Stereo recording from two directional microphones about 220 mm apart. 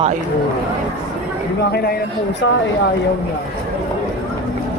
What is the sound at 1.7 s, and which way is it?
Speech, 45° left (ahead or behind).